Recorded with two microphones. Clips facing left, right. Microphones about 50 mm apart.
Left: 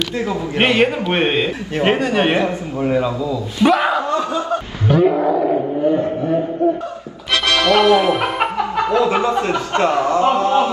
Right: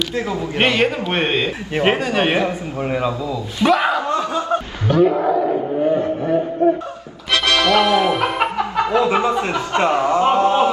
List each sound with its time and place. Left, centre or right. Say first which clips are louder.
0.6 s a man's voice: left 2 dB; centre
1.8 s speech: left 1 dB; centre
2.4 s speech: left 2 dB; centre
3.6 s a man's voice: left 1 dB; centre
5.1 s speech: left 1 dB; centre
7.4 s speech: left 2 dB; centre
8.9 s speech: left 1 dB; right